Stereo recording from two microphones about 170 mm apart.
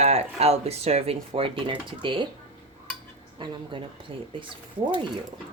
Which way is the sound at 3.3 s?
25° right (ahead or behind).